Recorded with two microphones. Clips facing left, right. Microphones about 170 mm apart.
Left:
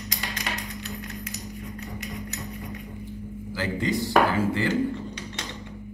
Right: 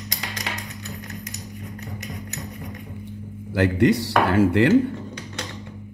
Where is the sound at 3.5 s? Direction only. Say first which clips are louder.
Right 9 dB; 70° right (ahead or behind).